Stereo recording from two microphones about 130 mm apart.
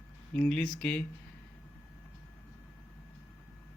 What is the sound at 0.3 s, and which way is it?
Speech, 10° left (ahead or behind).